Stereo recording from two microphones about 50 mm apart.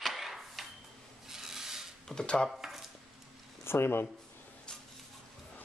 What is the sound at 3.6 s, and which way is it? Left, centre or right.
Speech, left.